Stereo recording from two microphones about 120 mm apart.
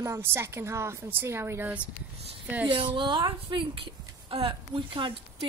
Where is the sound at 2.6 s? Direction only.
40° right (ahead or behind).